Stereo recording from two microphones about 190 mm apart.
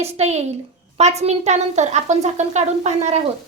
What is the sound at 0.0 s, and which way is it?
A woman's voice, 35° right (ahead or behind).